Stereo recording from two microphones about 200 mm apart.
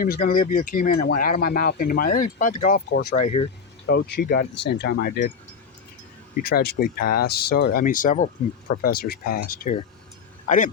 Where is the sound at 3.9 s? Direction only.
55° left (ahead or behind).